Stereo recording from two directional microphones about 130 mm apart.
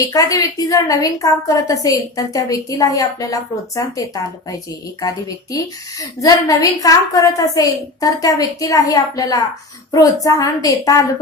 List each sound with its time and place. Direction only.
0.1 s a woman's voice: 25° left (ahead or behind)